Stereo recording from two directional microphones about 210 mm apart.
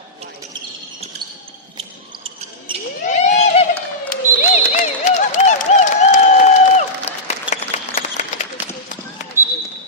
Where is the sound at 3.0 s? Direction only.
35° left (ahead or behind).